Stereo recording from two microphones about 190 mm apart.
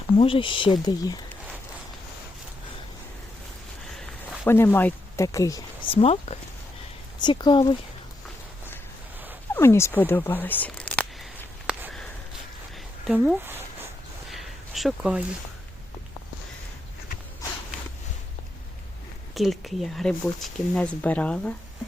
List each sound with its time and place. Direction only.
0.2 s speech: 30° left (ahead or behind)
4.4 s speech: 10° left (ahead or behind)
9.6 s a sound: 15° left (ahead or behind); by 12.0 s 5° right (ahead or behind)
13.1 s speech: centre (ahead or behind)
14.3 s a sound: centre (ahead or behind)
19.3 s speech: centre (ahead or behind)